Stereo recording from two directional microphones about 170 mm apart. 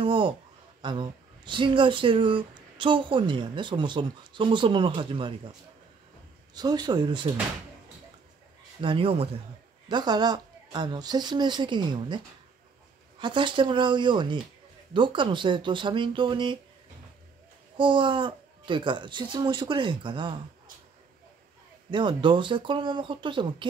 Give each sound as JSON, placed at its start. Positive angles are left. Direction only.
{"t": 0.0, "sound": "a sound", "side_deg": -30}
{"t": 0.8, "sound": "speech", "side_deg": -25}
{"t": 6.5, "sound": "speech", "side_deg": -25}
{"t": 8.8, "sound": "a man's voice", "side_deg": -30}
{"t": 13.2, "sound": "speech", "side_deg": -30}
{"t": 17.7, "sound": "speech", "side_deg": -30}
{"t": 21.9, "sound": "speech", "side_deg": -30}